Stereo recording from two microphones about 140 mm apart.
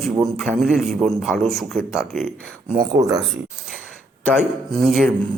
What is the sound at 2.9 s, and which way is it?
Speech, 25° right (ahead or behind).